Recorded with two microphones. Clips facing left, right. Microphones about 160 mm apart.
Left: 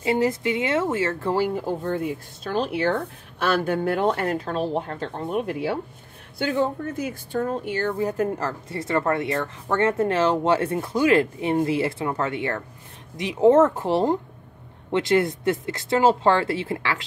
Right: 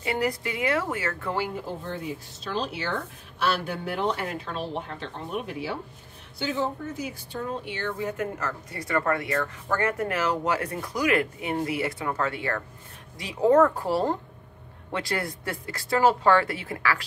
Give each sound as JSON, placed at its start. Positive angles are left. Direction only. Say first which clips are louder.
{"t": 0.0, "sound": "speech", "louder": "left 6 dB", "side_deg": 25}
{"t": 1.9, "sound": "speech", "louder": "left 7 dB", "side_deg": 55}